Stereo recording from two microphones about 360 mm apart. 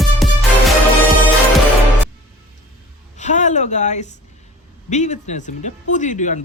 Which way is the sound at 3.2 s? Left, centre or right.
Centre.